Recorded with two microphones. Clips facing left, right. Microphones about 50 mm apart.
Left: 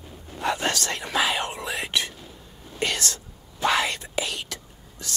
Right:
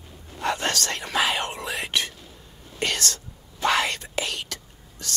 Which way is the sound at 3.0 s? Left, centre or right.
Left.